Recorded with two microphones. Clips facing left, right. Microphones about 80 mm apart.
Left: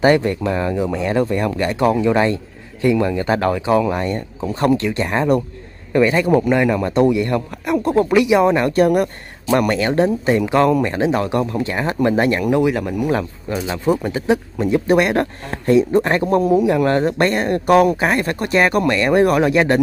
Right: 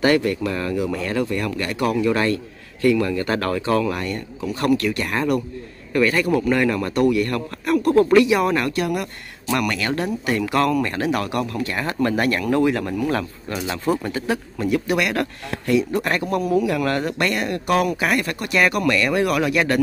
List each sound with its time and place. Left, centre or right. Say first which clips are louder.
0.0 s speech: left 3 dB; left
8.7 s speech: left 9 dB; left; by 14.8 s centre
14.9 s speech: left 6 dB; left